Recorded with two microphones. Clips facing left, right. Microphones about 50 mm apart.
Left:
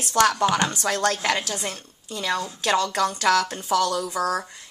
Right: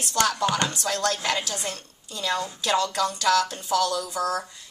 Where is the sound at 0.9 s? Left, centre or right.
Left.